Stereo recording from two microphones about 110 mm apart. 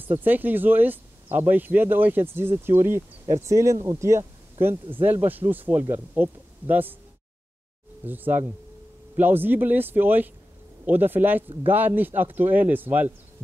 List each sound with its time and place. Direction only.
0.2 s speech: 15° right (ahead or behind)
8.0 s speech: 15° right (ahead or behind)